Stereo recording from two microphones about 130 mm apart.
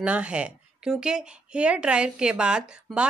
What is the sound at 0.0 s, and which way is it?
A woman's voice, 10° right (ahead or behind).